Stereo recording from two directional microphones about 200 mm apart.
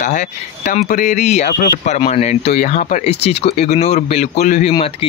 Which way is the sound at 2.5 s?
45° left (ahead or behind).